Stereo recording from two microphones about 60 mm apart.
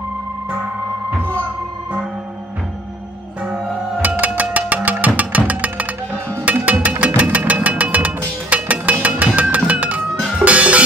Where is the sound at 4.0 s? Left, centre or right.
Right.